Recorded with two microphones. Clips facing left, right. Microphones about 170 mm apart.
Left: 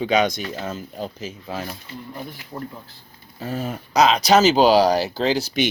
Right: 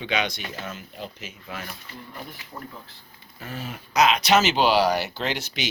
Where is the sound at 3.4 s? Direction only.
40° left (ahead or behind).